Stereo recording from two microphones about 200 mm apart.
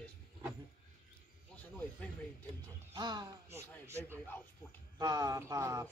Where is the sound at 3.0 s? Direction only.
20° right (ahead or behind).